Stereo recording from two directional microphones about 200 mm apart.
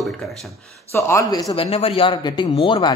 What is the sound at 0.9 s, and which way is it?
Speech, 15° left (ahead or behind).